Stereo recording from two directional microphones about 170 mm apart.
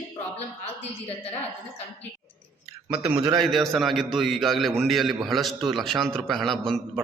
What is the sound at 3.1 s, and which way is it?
Speech, 25° right (ahead or behind).